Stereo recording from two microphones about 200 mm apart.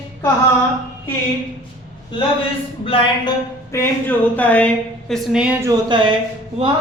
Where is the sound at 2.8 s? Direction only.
25° left (ahead or behind).